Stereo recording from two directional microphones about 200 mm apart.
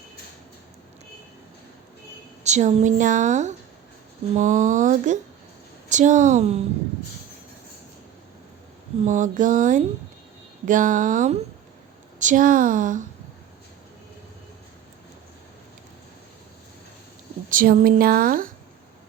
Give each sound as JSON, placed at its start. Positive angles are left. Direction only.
{"t": 2.4, "sound": "a woman's voice", "side_deg": -35}
{"t": 9.0, "sound": "a woman's voice", "side_deg": -40}
{"t": 17.5, "sound": "speech", "side_deg": -45}